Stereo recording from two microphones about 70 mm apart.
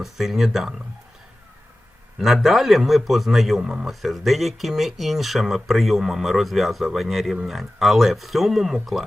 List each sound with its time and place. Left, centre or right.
0.0 s speech: centre
2.1 s speech: centre
3.6 s speech: centre
3.8 s speech: centre